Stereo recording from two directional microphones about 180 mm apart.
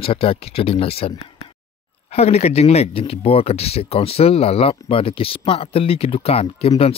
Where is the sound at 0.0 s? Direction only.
30° left (ahead or behind).